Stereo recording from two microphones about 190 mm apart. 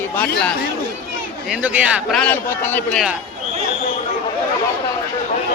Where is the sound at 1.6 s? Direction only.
5° right (ahead or behind).